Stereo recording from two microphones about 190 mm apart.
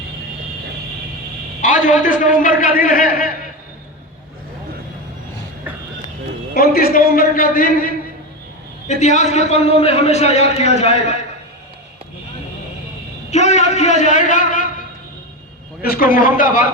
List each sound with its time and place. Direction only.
1.6 s a man's voice: 45° left (ahead or behind)
6.5 s a man's voice: 50° left (ahead or behind); by 11.3 s 35° left (ahead or behind)
13.3 s a man's voice: 35° left (ahead or behind)